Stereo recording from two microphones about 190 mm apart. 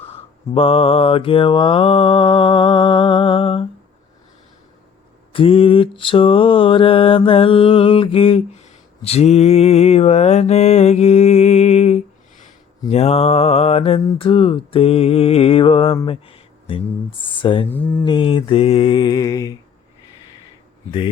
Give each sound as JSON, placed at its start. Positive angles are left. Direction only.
{"t": 0.5, "sound": "mantra", "side_deg": 30}
{"t": 5.3, "sound": "mantra", "side_deg": 30}
{"t": 16.0, "sound": "a sound", "side_deg": 30}
{"t": 17.2, "sound": "mantra", "side_deg": 25}
{"t": 17.7, "sound": "speech", "side_deg": 10}
{"t": 18.0, "sound": "mantra", "side_deg": 25}